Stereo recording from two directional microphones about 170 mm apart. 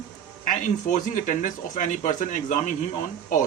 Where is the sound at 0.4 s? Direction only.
50° left (ahead or behind).